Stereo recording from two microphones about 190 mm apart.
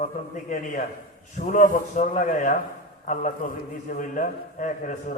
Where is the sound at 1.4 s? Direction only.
45° left (ahead or behind).